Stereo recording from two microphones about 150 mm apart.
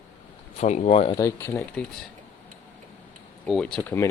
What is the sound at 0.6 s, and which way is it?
Speech, 50° left (ahead or behind).